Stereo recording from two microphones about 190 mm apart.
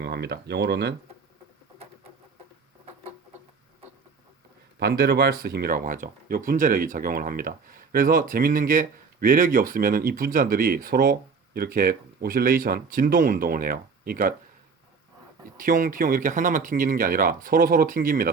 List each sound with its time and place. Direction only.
0.0 s speech: 60° right (ahead or behind)
4.8 s speech: 55° right (ahead or behind)
15.5 s speech: 45° right (ahead or behind)